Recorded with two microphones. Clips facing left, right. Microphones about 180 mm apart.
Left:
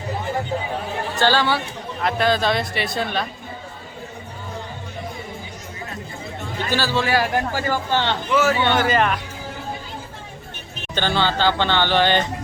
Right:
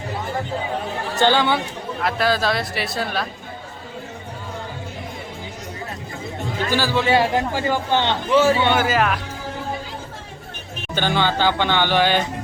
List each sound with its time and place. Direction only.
1.2 s a man's voice: 20° right (ahead or behind)
2.0 s speech: 5° right (ahead or behind)
6.7 s a man's voice: 15° right (ahead or behind)
8.3 s a man's voice: 30° right (ahead or behind)
8.6 s speech: 10° right (ahead or behind)
10.9 s speech: 15° right (ahead or behind)